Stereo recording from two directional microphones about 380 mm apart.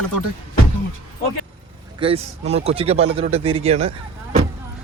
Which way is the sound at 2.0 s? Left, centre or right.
Centre.